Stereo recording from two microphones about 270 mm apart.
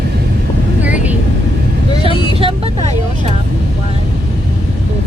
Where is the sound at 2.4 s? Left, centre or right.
Right.